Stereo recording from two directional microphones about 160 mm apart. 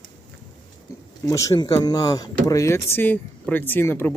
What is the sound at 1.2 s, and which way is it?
Speech, 20° left (ahead or behind).